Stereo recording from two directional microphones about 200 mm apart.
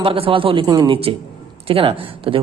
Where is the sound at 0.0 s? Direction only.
25° right (ahead or behind).